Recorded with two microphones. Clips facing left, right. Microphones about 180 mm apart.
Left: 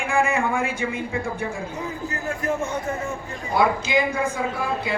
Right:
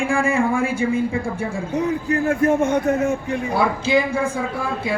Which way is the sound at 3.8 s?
30° right (ahead or behind).